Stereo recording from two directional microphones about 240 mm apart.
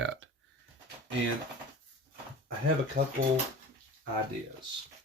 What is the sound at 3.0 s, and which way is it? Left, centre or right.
Speech, right.